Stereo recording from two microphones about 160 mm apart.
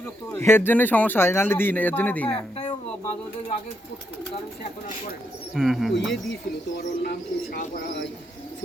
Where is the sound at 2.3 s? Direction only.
35° left (ahead or behind).